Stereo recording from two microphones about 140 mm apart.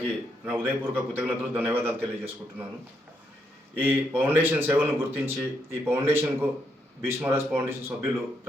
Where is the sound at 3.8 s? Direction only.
15° right (ahead or behind).